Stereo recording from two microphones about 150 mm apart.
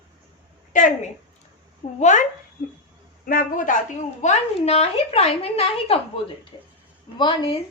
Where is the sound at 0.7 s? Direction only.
60° left (ahead or behind).